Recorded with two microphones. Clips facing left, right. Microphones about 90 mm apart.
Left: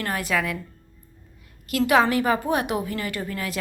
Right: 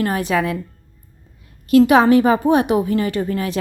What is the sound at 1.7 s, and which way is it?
A woman's voice, 25° right (ahead or behind).